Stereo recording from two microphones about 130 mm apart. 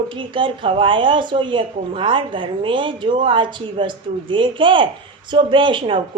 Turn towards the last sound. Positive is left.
turn(degrees=-40)  # may be behind; listen again after turning